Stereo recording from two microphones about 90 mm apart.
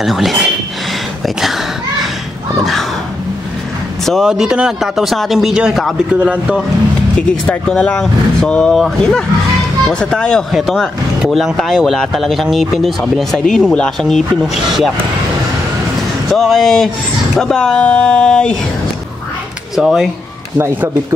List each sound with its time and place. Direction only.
0.0 s speech: centre (ahead or behind)
4.0 s a sound: 5° left (ahead or behind)
4.3 s speech: 10° right (ahead or behind)
6.1 s a man's voice: 15° right (ahead or behind)
7.2 s speech: 15° left (ahead or behind)
16.3 s speech: 5° left (ahead or behind)
19.7 s speech: 5° right (ahead or behind)
20.5 s a man's voice: 30° right (ahead or behind)